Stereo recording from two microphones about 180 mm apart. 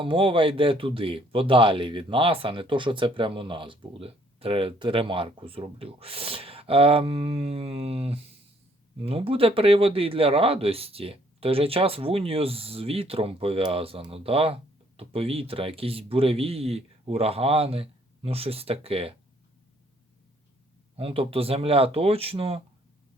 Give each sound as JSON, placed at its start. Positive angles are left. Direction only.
{"t": 0.0, "sound": "speech", "side_deg": -30}
{"t": 20.9, "sound": "speech", "side_deg": -30}